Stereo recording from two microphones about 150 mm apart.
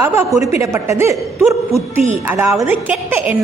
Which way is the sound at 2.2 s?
10° right (ahead or behind).